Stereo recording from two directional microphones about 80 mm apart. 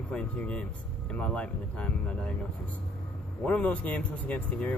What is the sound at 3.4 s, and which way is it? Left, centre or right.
Speech, centre.